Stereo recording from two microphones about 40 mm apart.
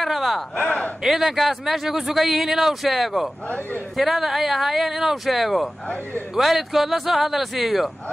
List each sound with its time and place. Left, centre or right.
0.0 s a sound: centre
1.0 s speech: centre
3.4 s a man's voice: left
3.9 s speech: centre